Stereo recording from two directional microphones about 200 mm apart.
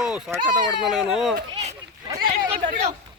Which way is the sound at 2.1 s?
40° right (ahead or behind).